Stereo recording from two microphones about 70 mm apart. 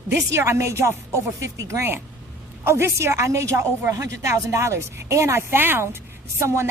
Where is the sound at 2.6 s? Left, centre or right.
Right.